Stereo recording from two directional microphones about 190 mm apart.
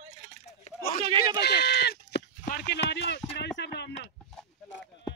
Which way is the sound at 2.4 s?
55° left (ahead or behind).